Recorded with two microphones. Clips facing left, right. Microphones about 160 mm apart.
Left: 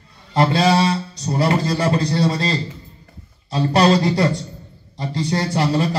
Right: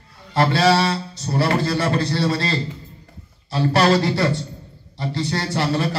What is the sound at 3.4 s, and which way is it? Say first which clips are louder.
A man's voice: left 2 dB; 20° left (ahead or behind).